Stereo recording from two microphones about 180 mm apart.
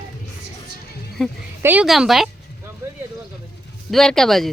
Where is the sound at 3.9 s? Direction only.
Centre (ahead or behind).